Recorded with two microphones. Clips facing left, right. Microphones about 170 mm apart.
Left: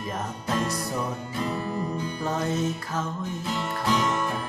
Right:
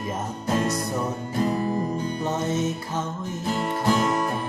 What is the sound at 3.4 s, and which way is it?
Music, 40° right (ahead or behind).